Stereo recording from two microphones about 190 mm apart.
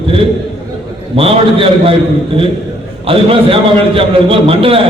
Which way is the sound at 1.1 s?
30° right (ahead or behind).